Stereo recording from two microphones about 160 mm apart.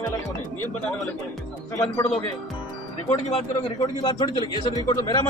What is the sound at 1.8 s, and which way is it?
Speech, 15° left (ahead or behind).